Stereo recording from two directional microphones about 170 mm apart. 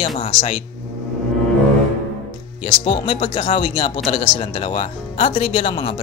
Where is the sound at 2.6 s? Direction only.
35° left (ahead or behind).